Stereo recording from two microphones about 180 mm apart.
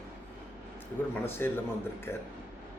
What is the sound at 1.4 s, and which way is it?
Speech, 10° left (ahead or behind).